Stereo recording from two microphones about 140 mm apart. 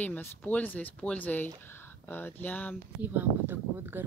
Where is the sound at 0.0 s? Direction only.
10° left (ahead or behind).